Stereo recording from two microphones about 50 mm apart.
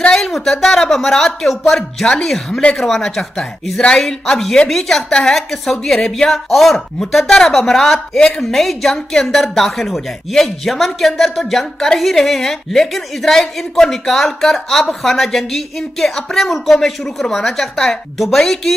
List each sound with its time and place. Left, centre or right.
0.1 s a woman's voice: centre